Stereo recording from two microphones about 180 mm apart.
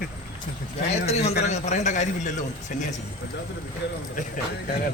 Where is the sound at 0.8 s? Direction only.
40° left (ahead or behind).